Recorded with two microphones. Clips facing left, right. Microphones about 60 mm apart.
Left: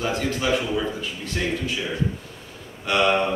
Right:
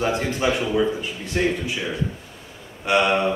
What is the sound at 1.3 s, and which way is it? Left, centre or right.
Speech, centre.